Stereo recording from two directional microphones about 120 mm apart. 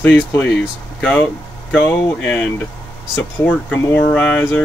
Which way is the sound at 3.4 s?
15° left (ahead or behind).